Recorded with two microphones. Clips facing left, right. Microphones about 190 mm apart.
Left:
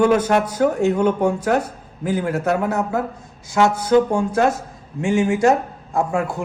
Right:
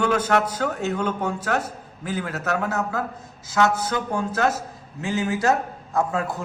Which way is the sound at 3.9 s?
25° left (ahead or behind).